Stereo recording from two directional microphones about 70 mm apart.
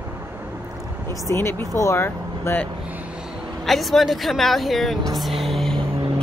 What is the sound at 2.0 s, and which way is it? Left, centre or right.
Vehicle, left.